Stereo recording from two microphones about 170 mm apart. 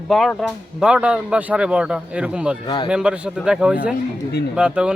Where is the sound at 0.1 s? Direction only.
Centre (ahead or behind).